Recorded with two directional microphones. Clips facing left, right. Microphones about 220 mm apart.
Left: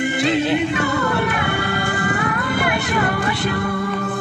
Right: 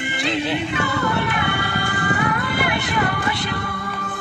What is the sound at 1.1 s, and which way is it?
Music, 40° left (ahead or behind).